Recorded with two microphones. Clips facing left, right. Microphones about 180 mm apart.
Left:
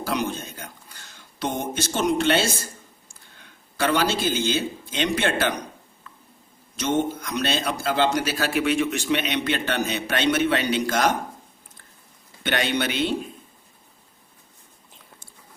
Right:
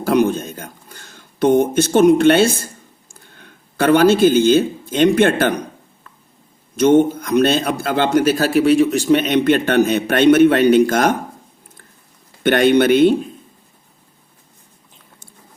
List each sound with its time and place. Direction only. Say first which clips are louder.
0.0 s speech: right 11 dB; 55° right (ahead or behind)
6.7 s a man's voice: right 11 dB; 55° right (ahead or behind)
12.4 s a man's voice: right 12 dB; 55° right (ahead or behind)